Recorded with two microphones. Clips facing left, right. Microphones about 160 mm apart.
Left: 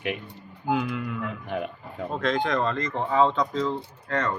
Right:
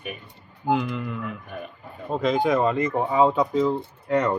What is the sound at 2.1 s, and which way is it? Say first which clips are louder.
Speech: right 4 dB; 5° right (ahead or behind).